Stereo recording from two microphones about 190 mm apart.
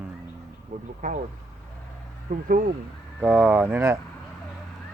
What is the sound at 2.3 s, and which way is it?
Speech, 40° right (ahead or behind).